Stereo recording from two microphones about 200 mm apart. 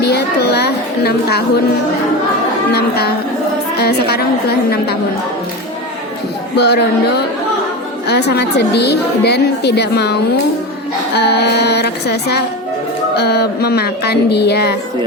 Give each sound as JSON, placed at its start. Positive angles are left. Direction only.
{"t": 0.0, "sound": "a woman's voice", "side_deg": 55}
{"t": 2.7, "sound": "a woman's voice", "side_deg": 55}
{"t": 6.6, "sound": "a woman's voice", "side_deg": 55}
{"t": 8.0, "sound": "a woman's voice", "side_deg": 55}